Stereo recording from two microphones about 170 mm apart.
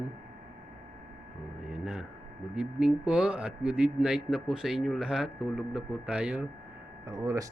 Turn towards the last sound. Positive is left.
turn(degrees=-20)  # may be behind; listen again after turning